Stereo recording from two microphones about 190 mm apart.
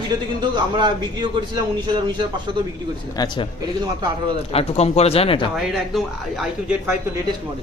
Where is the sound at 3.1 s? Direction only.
20° left (ahead or behind).